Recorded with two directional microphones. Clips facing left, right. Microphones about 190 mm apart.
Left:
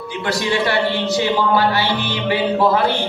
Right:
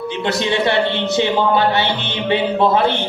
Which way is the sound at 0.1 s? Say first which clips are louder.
Even; 25° right (ahead or behind).